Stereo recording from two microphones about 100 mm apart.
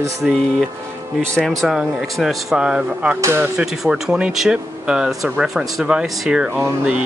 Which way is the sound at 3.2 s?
25° right (ahead or behind).